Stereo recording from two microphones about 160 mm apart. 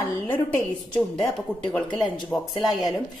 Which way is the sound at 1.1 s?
Centre (ahead or behind).